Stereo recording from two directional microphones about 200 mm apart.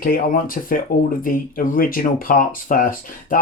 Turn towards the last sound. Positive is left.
turn(degrees=45)  # may be behind; listen again after turning